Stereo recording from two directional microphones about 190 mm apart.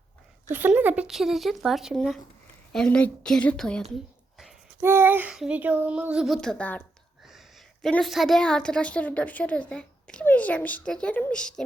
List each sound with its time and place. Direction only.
0.4 s speech: 10° right (ahead or behind)
4.4 s a woman's voice: 5° right (ahead or behind)